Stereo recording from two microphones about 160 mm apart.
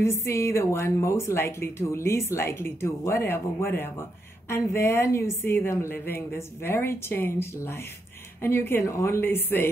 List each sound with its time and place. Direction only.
0.0 s a woman's voice: 15° left (ahead or behind)